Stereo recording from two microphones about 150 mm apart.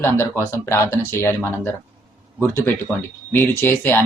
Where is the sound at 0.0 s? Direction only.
15° left (ahead or behind).